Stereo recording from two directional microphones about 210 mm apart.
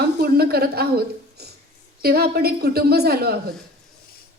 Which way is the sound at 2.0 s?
50° right (ahead or behind).